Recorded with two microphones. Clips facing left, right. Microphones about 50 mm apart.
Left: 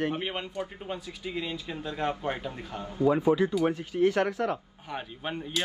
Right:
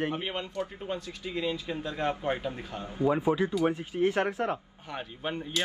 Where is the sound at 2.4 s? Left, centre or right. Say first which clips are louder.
Right 1 dB; centre.